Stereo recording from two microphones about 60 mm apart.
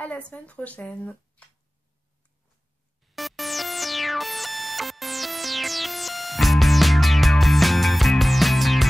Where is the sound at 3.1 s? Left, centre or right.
Centre.